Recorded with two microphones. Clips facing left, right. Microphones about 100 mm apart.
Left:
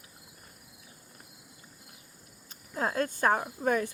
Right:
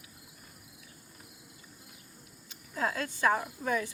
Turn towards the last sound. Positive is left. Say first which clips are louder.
# left 4 dB
turn(degrees=45)  # may be behind; listen again after turning